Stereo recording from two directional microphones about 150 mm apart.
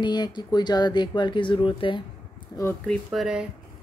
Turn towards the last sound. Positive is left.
turn(degrees=-5)  # may be behind; listen again after turning